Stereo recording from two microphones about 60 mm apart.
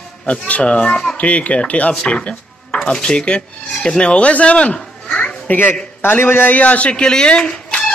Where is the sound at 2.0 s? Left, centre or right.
Left.